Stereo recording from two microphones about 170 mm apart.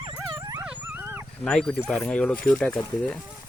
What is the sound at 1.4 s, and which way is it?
Speech, 5° left (ahead or behind).